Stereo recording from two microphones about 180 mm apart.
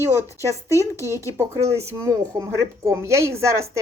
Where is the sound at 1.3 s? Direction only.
15° right (ahead or behind).